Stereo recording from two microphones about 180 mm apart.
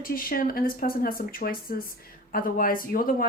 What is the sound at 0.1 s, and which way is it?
Speech, 50° left (ahead or behind).